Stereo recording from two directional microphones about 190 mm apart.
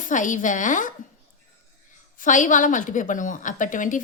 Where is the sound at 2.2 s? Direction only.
40° left (ahead or behind).